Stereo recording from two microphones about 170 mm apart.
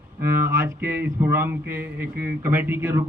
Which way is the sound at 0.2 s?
15° right (ahead or behind).